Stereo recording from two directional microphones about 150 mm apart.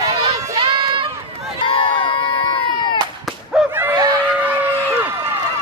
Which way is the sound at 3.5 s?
5° right (ahead or behind).